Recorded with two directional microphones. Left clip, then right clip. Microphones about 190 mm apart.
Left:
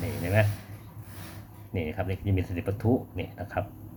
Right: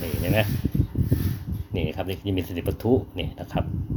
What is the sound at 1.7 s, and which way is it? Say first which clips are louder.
Speech: right 3 dB; 25° right (ahead or behind).